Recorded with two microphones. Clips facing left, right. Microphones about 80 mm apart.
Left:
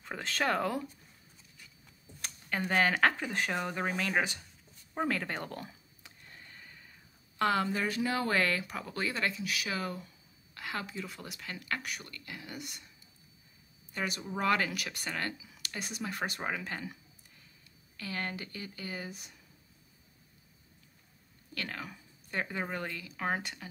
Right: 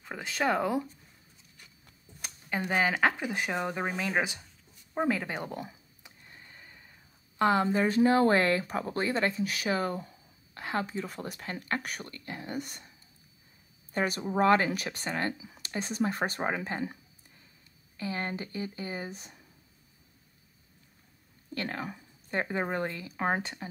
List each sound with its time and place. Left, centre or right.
0.0 s speech: centre
2.2 s speech: centre; by 12.9 s right
13.9 s speech: right
21.5 s speech: right